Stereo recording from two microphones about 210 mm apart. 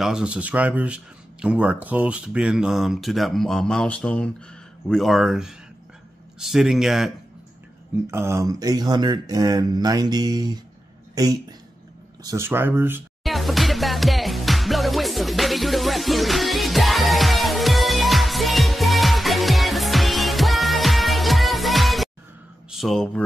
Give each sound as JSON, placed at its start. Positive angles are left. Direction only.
{"t": 0.0, "sound": "speech", "side_deg": -5}
{"t": 8.1, "sound": "speech", "side_deg": -15}
{"t": 13.2, "sound": "music", "side_deg": 0}
{"t": 22.7, "sound": "speech", "side_deg": 0}